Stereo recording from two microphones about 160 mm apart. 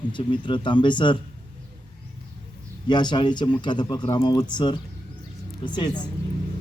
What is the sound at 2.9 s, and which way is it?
A man's voice, 30° left (ahead or behind).